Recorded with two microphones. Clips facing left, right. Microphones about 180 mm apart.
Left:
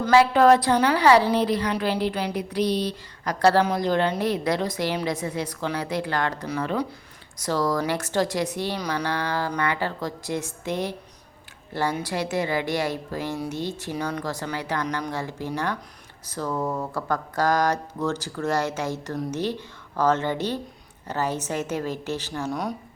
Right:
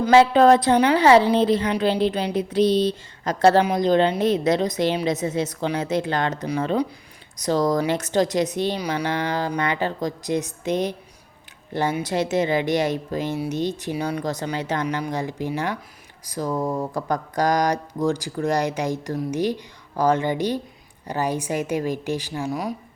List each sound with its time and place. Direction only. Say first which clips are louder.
0.1 s a woman's voice: right 2 dB; 25° right (ahead or behind)